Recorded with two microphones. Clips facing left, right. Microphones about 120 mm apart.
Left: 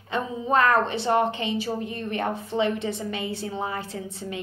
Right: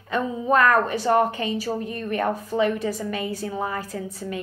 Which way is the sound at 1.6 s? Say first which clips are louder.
Right 1 dB; 20° left (ahead or behind).